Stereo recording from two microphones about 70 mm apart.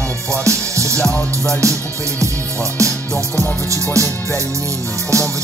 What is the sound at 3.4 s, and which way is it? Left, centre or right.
Music, right.